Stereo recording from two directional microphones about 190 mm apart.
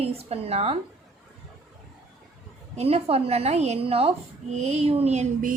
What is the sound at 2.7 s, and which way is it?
A woman's voice, 30° right (ahead or behind).